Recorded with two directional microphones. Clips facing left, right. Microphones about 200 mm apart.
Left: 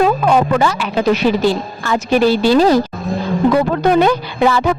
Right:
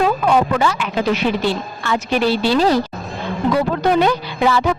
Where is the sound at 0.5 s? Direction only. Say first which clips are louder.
Left 3 dB; 40° left (ahead or behind).